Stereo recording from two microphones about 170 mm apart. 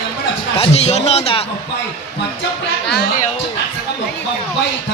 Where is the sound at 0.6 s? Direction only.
40° left (ahead or behind).